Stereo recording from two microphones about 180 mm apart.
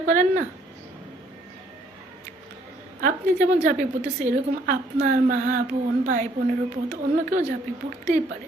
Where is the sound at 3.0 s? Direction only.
55° right (ahead or behind).